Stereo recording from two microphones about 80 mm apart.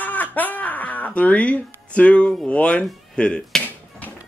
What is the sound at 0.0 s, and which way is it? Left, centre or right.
Music, left.